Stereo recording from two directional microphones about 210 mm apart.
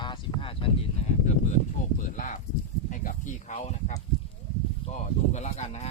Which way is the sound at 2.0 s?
40° left (ahead or behind).